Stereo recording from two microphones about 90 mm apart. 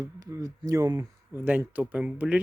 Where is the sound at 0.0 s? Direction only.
40° right (ahead or behind).